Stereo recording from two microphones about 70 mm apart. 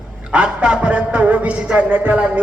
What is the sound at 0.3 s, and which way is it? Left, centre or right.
A man's voice, centre.